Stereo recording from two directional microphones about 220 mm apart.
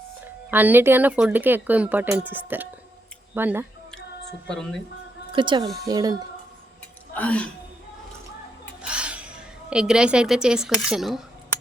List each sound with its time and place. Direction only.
0.5 s speech: 10° right (ahead or behind)
3.9 s a sound: centre (ahead or behind)
5.3 s speech: 20° right (ahead or behind)
5.6 s speech: centre (ahead or behind)
5.9 s speech: 15° right (ahead or behind)
7.1 s speech: 5° left (ahead or behind)
8.8 s a woman's voice: 5° right (ahead or behind)